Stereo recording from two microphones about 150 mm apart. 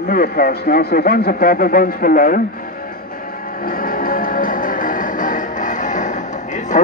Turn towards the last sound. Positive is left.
turn(degrees=55)  # may be behind; listen again after turning